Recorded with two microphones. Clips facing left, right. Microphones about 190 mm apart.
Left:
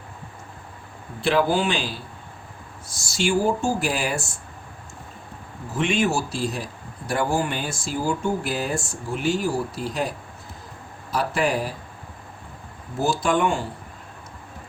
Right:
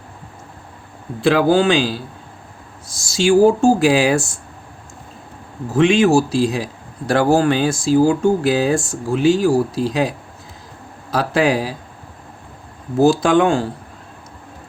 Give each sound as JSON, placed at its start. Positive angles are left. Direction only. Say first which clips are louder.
{"t": 1.2, "sound": "speech", "louder": "right 7 dB", "side_deg": -90}
{"t": 5.7, "sound": "speech", "louder": "right 10 dB", "side_deg": -90}
{"t": 13.0, "sound": "speech", "louder": "right 9 dB", "side_deg": -90}